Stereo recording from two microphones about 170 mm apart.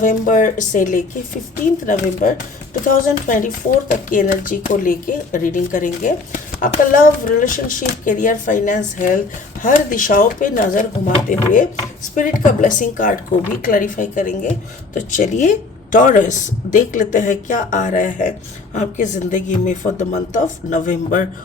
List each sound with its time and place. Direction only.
0.0 s speech: 50° left (ahead or behind)